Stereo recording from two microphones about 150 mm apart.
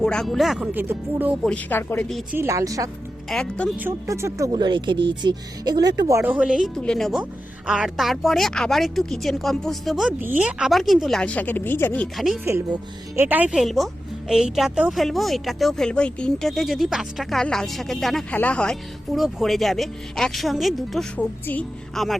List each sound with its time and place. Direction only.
0.0 s a woman's voice: 5° left (ahead or behind); by 1.4 s 10° right (ahead or behind)
1.5 s speech: 10° left (ahead or behind)
2.3 s speech: 20° right (ahead or behind)
3.2 s a woman's voice: 5° left (ahead or behind)
3.8 s speech: 15° right (ahead or behind)
6.7 s a woman's voice: 5° left (ahead or behind)
12.1 s a woman's voice: centre (ahead or behind)
13.1 s a woman's voice: 10° right (ahead or behind)